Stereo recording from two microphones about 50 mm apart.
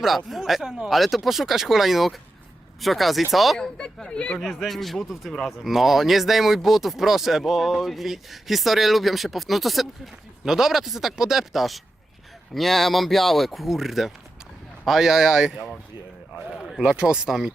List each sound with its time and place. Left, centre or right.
0.3 s speech: centre
3.6 s speech: centre
4.4 s speech: centre
17.2 s speech: centre